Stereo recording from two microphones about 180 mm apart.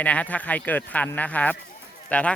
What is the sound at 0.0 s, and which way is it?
Speech, 10° left (ahead or behind).